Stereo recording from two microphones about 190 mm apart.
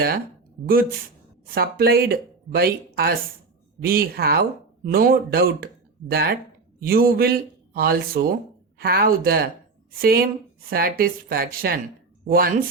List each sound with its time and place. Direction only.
1.5 s speech: 50° right (ahead or behind)